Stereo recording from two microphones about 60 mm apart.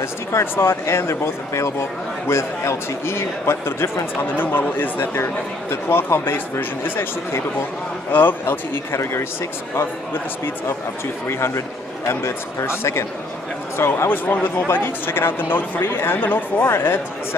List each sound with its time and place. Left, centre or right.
0.0 s a man's voice: left
8.1 s speech: left
8.9 s a man's voice: left
11.2 s a man's voice: left